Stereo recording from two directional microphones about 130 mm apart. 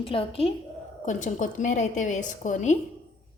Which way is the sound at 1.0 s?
75° left (ahead or behind).